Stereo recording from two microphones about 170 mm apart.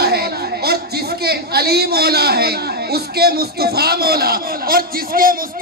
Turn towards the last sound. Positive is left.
turn(degrees=-60)  # may be behind; listen again after turning